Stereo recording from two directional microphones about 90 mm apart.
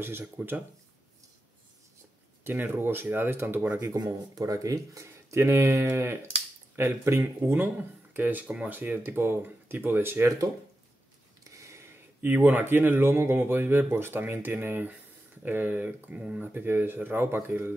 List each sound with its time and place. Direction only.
0.0 s speech: 25° right (ahead or behind)
2.4 s speech: 25° right (ahead or behind)
4.0 s speech: 40° right (ahead or behind); by 10.3 s 25° right (ahead or behind)
11.5 s a sound: 35° right (ahead or behind)
12.2 s speech: 20° right (ahead or behind)
16.5 s speech: 25° right (ahead or behind)